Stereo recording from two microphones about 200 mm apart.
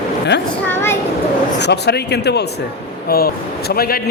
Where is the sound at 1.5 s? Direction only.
60° left (ahead or behind).